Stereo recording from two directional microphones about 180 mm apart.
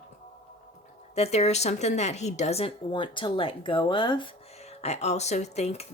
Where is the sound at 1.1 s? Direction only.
35° left (ahead or behind).